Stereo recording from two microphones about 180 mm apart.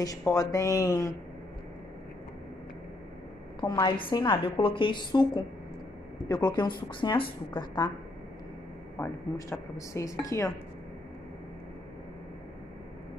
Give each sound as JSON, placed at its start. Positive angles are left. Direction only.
{"t": 0.2, "sound": "speech", "side_deg": 20}
{"t": 3.6, "sound": "a woman's voice", "side_deg": 25}
{"t": 8.9, "sound": "speech", "side_deg": 15}